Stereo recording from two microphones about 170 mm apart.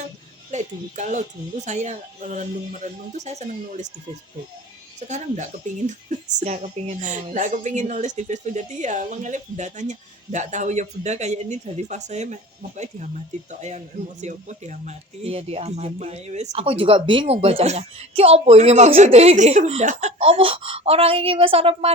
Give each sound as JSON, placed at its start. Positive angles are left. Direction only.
{"t": 0.5, "sound": "a woman's voice", "side_deg": -45}
{"t": 4.9, "sound": "a woman's voice", "side_deg": -45}